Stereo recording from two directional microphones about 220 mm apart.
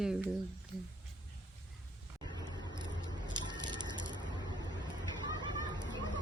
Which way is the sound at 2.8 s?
20° right (ahead or behind).